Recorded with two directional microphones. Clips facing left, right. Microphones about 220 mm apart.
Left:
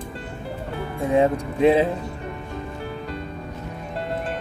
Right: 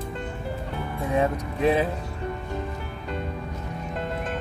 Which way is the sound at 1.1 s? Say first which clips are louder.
Left 5 dB; 25° left (ahead or behind).